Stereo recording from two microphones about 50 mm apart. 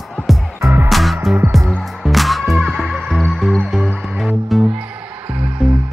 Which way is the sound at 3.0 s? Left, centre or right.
Centre.